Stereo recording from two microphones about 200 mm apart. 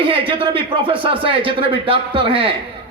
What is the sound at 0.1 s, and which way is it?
Speech, 25° right (ahead or behind).